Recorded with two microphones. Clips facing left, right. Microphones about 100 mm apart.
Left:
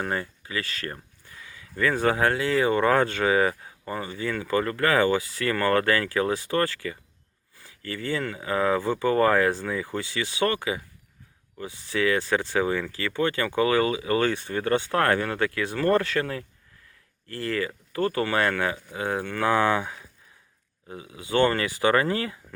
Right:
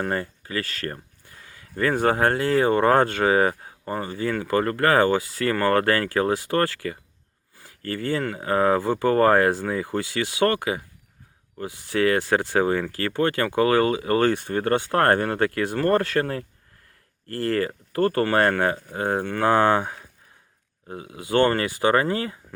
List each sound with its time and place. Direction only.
0.0 s speech: 40° right (ahead or behind)